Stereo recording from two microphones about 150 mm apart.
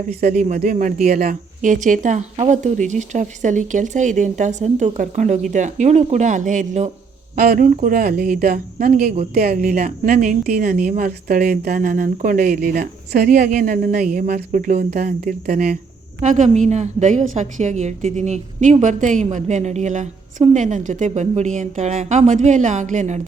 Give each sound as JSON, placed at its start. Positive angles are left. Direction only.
{"t": 0.1, "sound": "a woman's voice", "side_deg": -50}
{"t": 7.3, "sound": "a woman's voice", "side_deg": -75}